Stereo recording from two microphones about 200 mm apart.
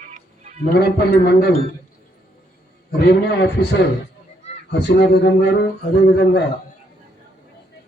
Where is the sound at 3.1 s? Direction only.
55° left (ahead or behind).